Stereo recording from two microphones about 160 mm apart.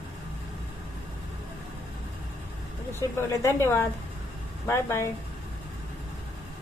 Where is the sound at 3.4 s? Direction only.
15° left (ahead or behind).